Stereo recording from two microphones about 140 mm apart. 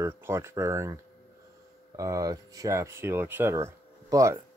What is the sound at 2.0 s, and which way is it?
Speech, 25° right (ahead or behind).